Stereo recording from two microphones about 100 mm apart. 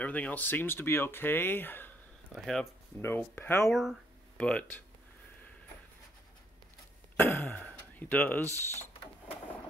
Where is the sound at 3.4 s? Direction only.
25° left (ahead or behind).